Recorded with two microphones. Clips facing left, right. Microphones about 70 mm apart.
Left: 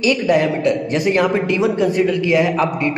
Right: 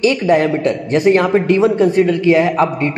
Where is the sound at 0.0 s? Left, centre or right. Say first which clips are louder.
Right 2 dB; right.